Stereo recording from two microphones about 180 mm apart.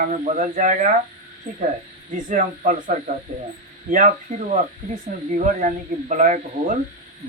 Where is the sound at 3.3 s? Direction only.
45° right (ahead or behind).